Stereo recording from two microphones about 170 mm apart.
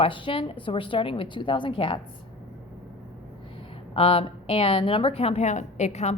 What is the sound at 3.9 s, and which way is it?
A woman's voice, 35° left (ahead or behind).